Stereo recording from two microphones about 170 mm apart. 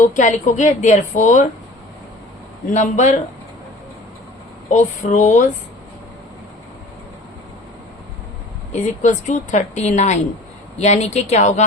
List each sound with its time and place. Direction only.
0.0 s speech: 45° left (ahead or behind)
2.7 s speech: 45° left (ahead or behind)
4.7 s speech: 45° left (ahead or behind)
8.7 s speech: 45° left (ahead or behind)